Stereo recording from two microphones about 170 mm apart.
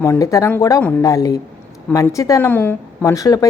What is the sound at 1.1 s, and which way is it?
A woman's voice, 20° left (ahead or behind).